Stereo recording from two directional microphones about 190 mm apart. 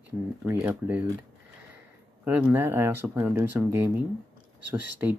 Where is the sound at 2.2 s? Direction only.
10° right (ahead or behind).